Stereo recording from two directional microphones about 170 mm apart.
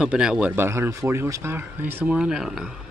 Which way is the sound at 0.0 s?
5° right (ahead or behind).